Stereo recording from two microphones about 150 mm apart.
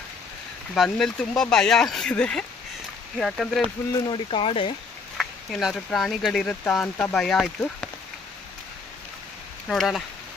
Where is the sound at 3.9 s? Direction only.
35° left (ahead or behind).